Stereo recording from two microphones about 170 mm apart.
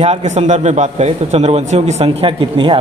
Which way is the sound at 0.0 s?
40° right (ahead or behind).